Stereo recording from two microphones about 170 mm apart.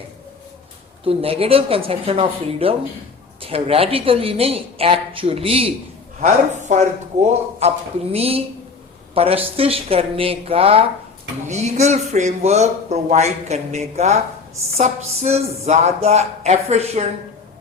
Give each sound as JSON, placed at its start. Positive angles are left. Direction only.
{"t": 1.0, "sound": "a man's voice", "side_deg": -35}
{"t": 6.2, "sound": "a man's voice", "side_deg": -45}